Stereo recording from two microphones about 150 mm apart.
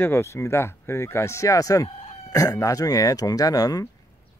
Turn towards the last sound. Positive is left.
turn(degrees=25)  # may be behind; listen again after turning